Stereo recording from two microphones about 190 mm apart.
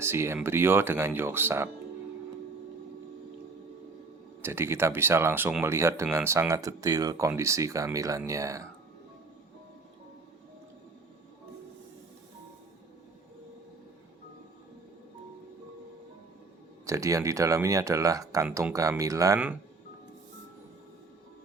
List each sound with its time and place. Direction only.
0.0 s speech: 15° right (ahead or behind)
4.4 s speech: 15° right (ahead or behind)
16.8 s speech: 15° right (ahead or behind)